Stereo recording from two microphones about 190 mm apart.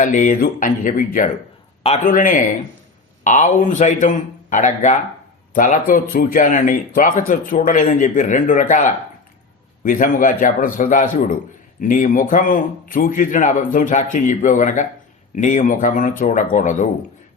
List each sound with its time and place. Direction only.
0.0 s a man's voice: 40° left (ahead or behind)